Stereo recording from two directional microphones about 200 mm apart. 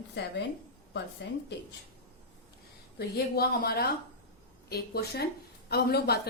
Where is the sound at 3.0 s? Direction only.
50° left (ahead or behind).